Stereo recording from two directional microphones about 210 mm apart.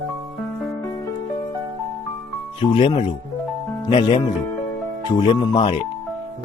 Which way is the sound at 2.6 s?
25° left (ahead or behind).